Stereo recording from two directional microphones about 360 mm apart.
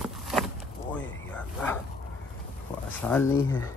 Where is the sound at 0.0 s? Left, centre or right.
Centre.